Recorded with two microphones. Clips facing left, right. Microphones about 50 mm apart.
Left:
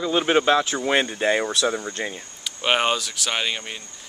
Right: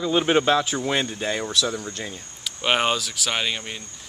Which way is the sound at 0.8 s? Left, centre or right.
Left.